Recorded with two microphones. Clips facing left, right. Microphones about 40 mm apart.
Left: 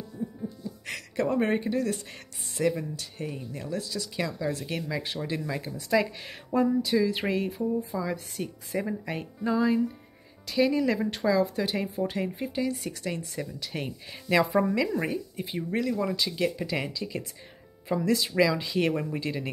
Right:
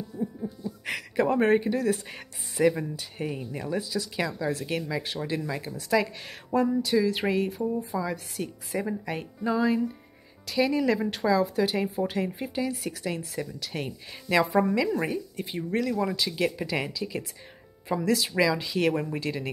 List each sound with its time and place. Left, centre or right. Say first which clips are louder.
0.1 s music: right 3 dB; centre
0.8 s speech: right 3 dB; centre
3.9 s a woman's voice: right 2 dB; centre